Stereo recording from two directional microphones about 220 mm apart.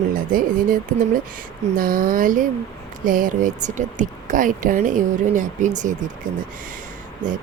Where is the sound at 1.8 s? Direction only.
40° right (ahead or behind).